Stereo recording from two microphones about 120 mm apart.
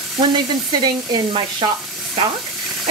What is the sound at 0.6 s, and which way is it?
Speech, 35° right (ahead or behind).